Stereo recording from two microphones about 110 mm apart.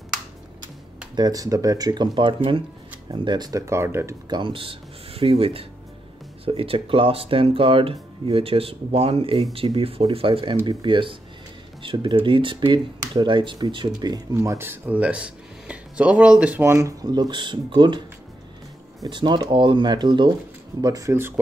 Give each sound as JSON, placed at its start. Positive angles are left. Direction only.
{"t": 1.1, "sound": "speech", "side_deg": -35}
{"t": 3.1, "sound": "speech", "side_deg": -40}
{"t": 4.3, "sound": "speech", "side_deg": -50}
{"t": 14.3, "sound": "speech", "side_deg": -25}
{"t": 17.1, "sound": "speech", "side_deg": -45}
{"t": 19.0, "sound": "speech", "side_deg": -45}
{"t": 20.8, "sound": "speech", "side_deg": -35}